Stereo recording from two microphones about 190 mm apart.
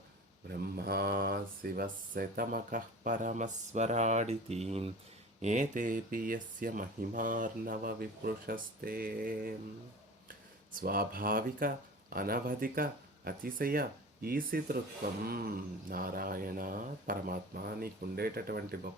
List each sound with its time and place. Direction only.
0.8 s speech: 55° right (ahead or behind)
10.8 s speech: 50° right (ahead or behind)